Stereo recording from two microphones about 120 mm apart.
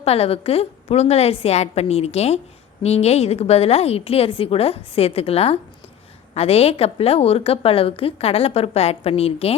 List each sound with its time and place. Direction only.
0.0 s a woman's voice: 55° left (ahead or behind)